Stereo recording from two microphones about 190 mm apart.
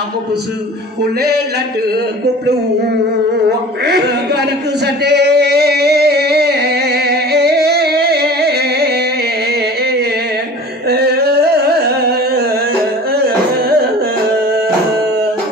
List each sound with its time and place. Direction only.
3.8 s a man's voice: 60° right (ahead or behind)
4.8 s singing: 60° right (ahead or behind)
9.5 s a sound: 55° right (ahead or behind)
13.1 s singing: 55° right (ahead or behind)